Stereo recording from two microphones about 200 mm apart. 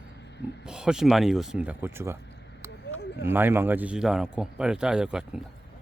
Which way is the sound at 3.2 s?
10° right (ahead or behind).